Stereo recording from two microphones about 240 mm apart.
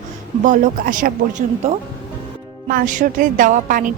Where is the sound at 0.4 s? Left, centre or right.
Right.